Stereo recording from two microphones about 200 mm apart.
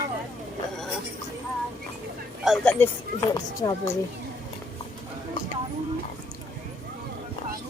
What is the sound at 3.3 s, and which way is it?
Speech, 15° left (ahead or behind).